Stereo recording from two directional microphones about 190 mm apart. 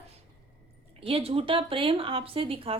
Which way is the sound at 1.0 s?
30° right (ahead or behind).